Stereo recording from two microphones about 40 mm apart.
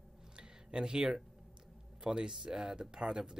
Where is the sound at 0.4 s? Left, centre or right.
Right.